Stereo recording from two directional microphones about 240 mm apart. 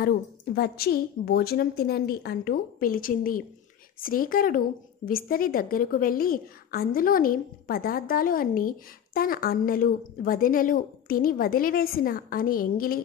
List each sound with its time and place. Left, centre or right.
0.0 s a woman's voice: left